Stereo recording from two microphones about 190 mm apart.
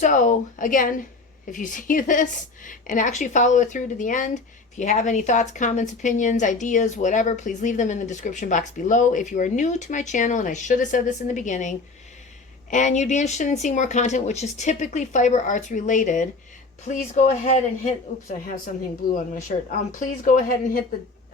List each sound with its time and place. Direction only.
0.0 s a woman's voice: 40° left (ahead or behind)
12.7 s a woman's voice: 40° left (ahead or behind)